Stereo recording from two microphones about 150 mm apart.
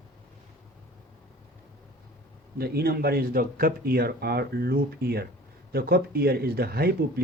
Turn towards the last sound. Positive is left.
turn(degrees=-90)